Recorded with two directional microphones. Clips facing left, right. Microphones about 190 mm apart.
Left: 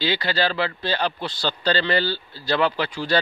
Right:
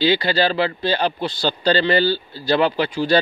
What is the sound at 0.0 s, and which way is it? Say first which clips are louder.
Speech: right 5 dB; 15° right (ahead or behind).